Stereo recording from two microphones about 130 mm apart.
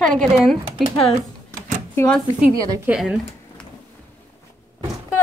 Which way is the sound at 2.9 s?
5° right (ahead or behind).